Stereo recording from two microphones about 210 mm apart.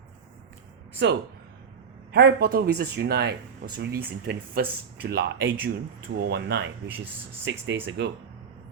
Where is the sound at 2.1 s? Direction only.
50° right (ahead or behind).